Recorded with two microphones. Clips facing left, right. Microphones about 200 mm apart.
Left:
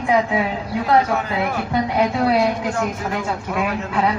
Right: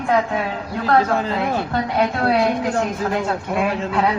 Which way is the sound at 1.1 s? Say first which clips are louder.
Right 1 dB; 30° right (ahead or behind).